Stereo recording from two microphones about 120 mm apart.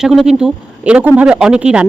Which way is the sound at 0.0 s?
5° right (ahead or behind).